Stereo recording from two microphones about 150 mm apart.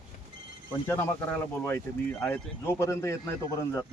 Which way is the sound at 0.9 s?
15° left (ahead or behind).